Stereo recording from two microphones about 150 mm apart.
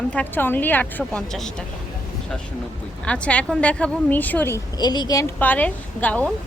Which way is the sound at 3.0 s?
10° left (ahead or behind).